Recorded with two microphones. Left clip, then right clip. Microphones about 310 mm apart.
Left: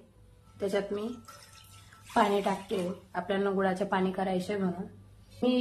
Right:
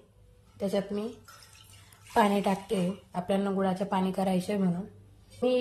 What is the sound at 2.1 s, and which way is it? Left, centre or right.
Speech, right.